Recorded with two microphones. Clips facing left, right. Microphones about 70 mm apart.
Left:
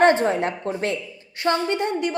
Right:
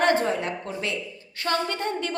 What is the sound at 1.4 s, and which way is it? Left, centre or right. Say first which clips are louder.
Speech: left 4 dB; left.